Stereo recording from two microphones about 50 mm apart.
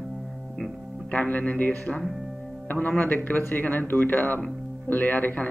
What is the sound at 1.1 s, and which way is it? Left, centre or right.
Speech, left.